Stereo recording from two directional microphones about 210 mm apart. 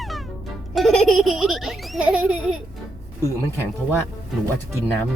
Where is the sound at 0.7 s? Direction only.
Centre (ahead or behind).